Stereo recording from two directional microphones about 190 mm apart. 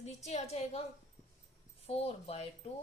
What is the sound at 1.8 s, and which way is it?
Speech, 30° left (ahead or behind).